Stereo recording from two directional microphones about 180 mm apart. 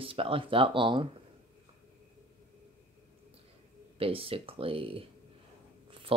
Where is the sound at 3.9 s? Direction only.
30° right (ahead or behind).